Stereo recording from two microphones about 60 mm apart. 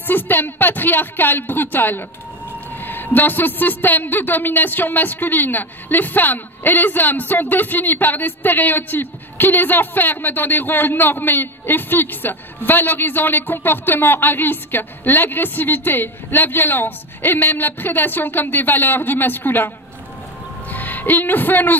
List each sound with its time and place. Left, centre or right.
0.0 s a man's voice: left
20.7 s a woman's voice: left